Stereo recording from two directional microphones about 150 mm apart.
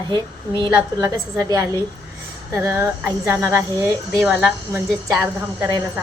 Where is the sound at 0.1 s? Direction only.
30° right (ahead or behind).